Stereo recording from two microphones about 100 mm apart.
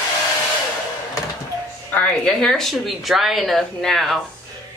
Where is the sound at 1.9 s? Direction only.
15° left (ahead or behind).